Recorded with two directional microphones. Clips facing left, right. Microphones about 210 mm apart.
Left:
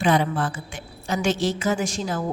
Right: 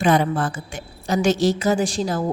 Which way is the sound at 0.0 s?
45° right (ahead or behind).